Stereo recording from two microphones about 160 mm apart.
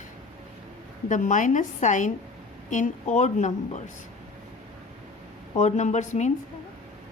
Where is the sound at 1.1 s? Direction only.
50° left (ahead or behind).